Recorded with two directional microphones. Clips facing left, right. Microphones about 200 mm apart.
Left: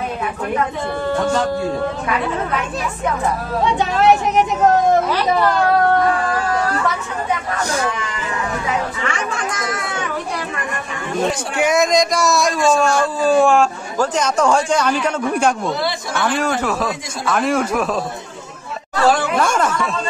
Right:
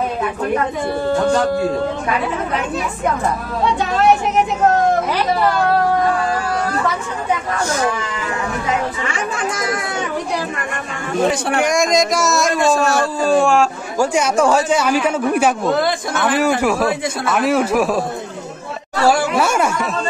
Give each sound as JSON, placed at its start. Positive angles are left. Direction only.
{"t": 11.6, "sound": "a man's voice", "side_deg": 5}
{"t": 15.7, "sound": "a man's voice", "side_deg": -50}
{"t": 16.3, "sound": "a man's voice", "side_deg": -10}
{"t": 19.0, "sound": "a man's voice", "side_deg": -10}